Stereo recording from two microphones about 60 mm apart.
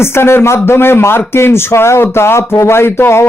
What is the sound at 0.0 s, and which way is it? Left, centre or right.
Speech, left.